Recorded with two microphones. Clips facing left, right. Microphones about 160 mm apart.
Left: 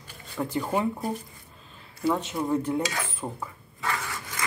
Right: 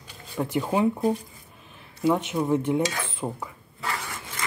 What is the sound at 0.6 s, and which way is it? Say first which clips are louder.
Speech: right 3 dB; 10° right (ahead or behind).